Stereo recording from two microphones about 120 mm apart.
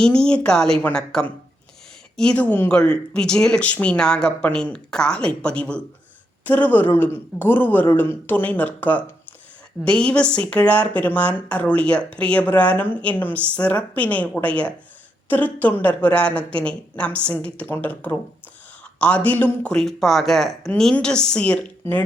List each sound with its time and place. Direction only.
0.0 s a woman's voice: 5° left (ahead or behind)